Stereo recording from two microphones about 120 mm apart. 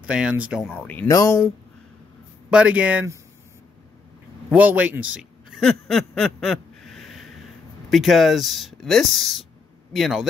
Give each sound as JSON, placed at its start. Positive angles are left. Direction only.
{"t": 0.0, "sound": "speech", "side_deg": -10}
{"t": 0.7, "sound": "speech", "side_deg": 10}
{"t": 1.0, "sound": "speech", "side_deg": 30}
{"t": 2.5, "sound": "speech", "side_deg": -10}
{"t": 4.5, "sound": "a man's voice", "side_deg": -10}
{"t": 5.6, "sound": "a sound", "side_deg": 5}
{"t": 7.9, "sound": "speech", "side_deg": 0}